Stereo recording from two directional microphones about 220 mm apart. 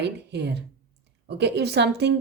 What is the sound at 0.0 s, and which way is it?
Speech, 50° right (ahead or behind).